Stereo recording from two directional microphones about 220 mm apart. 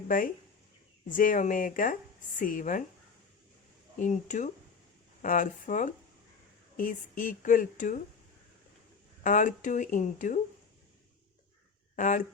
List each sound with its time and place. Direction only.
1.1 s speech: 35° left (ahead or behind)
3.9 s speech: 35° left (ahead or behind)
9.2 s speech: 35° left (ahead or behind)
11.9 s speech: 35° left (ahead or behind)